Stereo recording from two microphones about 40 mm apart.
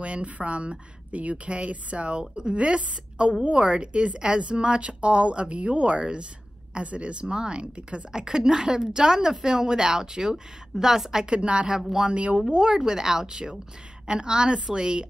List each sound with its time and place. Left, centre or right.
0.0 s a woman's voice: right; by 11.3 s centre
11.3 s a woman's voice: right
12.5 s a woman's voice: centre